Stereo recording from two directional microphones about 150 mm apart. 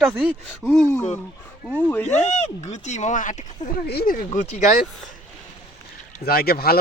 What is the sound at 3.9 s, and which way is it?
Speech, 80° left.